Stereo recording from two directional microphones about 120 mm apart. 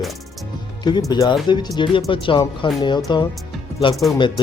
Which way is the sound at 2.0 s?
50° left (ahead or behind).